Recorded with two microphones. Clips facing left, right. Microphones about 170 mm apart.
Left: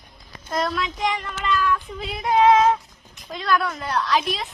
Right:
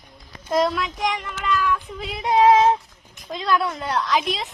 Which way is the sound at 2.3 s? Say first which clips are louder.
Right 1 dB; 30° right (ahead or behind).